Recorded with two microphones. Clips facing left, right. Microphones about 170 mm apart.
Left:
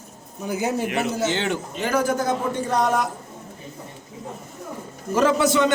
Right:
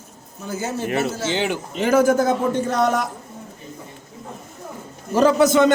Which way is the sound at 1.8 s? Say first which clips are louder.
Right 6 dB; 45° right (ahead or behind).